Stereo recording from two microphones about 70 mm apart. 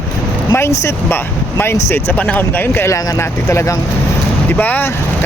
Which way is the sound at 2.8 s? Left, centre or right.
Left.